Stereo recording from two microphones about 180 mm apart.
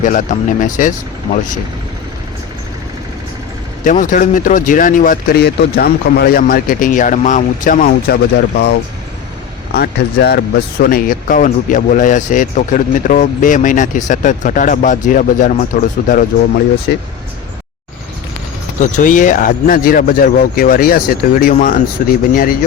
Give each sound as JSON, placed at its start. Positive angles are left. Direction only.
{"t": 0.0, "sound": "speech", "side_deg": 45}
{"t": 3.8, "sound": "speech", "side_deg": 45}
{"t": 9.7, "sound": "speech", "side_deg": 65}
{"t": 16.9, "sound": "speech", "side_deg": 60}
{"t": 18.8, "sound": "speech", "side_deg": 45}